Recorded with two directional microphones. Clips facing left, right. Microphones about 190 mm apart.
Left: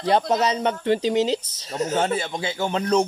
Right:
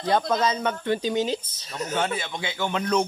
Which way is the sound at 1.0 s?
90° left.